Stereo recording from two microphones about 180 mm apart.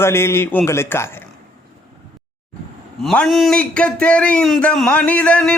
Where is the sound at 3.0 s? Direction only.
Centre (ahead or behind).